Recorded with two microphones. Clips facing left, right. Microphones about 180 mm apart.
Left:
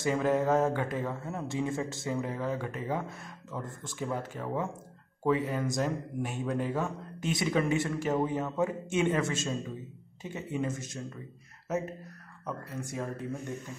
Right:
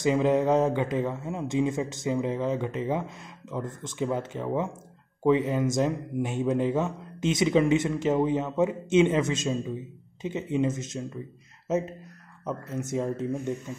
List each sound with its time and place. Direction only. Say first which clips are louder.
0.0 s speech: right 5 dB; 20° right (ahead or behind)
12.4 s speech: right 6 dB; 20° right (ahead or behind)